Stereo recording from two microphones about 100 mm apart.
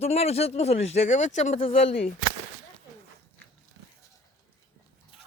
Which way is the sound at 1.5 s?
75° left (ahead or behind).